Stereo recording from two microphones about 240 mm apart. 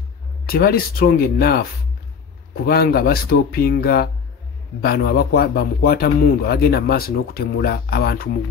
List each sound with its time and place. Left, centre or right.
0.5 s speech: left